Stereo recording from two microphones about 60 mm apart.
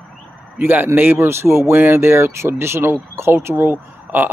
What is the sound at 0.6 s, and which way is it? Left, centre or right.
Speech, right.